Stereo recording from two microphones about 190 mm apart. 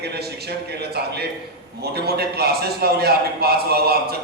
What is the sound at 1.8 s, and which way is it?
A man's voice, 55° right (ahead or behind).